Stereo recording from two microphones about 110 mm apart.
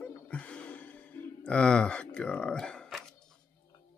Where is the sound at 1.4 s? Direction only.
10° left (ahead or behind).